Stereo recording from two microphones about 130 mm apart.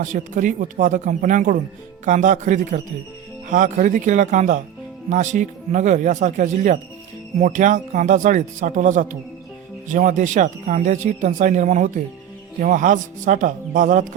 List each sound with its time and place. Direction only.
0.0 s speech: 80° right
3.5 s speech: 90° right; by 12.0 s 75° right (ahead or behind)
12.5 s speech: 85° right